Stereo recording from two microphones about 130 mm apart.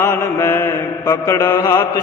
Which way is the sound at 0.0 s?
15° left (ahead or behind).